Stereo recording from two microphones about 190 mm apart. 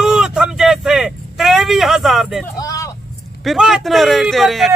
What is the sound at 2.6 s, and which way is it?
Vehicle, 20° left (ahead or behind).